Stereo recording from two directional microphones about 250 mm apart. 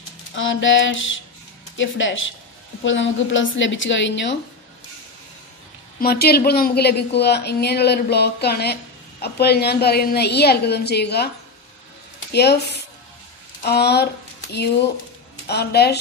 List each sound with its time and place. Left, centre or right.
0.3 s a woman's voice: left
5.9 s speech: left
12.3 s speech: left
13.6 s speech: left
15.4 s speech: left